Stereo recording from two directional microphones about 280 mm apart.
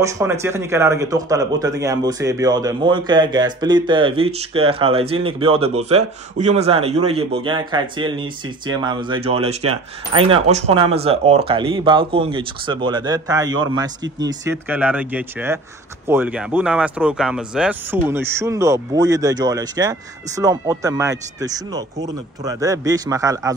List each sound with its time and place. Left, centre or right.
0.0 s a man's voice: centre